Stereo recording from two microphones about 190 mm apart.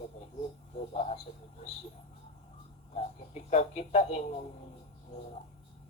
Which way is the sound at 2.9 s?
35° left (ahead or behind).